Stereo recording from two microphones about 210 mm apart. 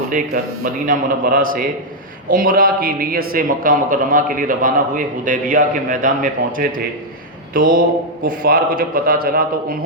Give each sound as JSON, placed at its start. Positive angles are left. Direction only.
{"t": 0.1, "sound": "a man's voice", "side_deg": -40}